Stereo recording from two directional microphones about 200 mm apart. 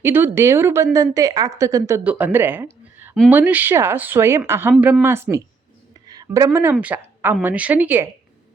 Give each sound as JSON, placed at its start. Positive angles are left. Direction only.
{"t": 0.0, "sound": "a woman's voice", "side_deg": -10}